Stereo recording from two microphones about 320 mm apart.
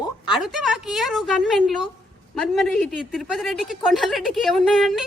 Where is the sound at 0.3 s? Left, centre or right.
Centre.